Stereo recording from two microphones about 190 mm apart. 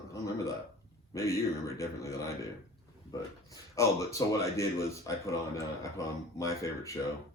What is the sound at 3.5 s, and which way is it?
Speech, 15° left (ahead or behind).